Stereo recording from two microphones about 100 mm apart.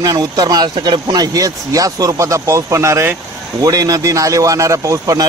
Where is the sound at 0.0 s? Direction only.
40° right (ahead or behind).